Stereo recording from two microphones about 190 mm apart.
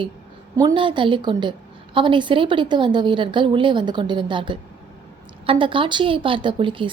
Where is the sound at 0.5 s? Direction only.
25° right (ahead or behind).